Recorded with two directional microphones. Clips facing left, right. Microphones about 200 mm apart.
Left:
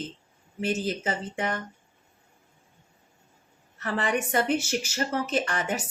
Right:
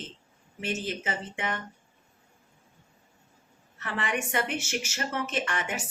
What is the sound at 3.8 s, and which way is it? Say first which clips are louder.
A woman's voice: left 4 dB; 35° left (ahead or behind).